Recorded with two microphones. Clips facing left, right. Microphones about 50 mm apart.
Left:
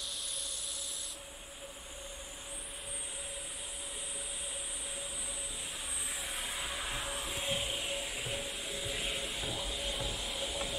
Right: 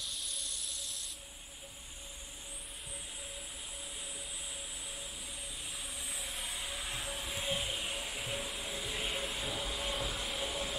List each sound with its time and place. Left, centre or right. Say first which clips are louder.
6.1 s vehicle: left 3 dB; centre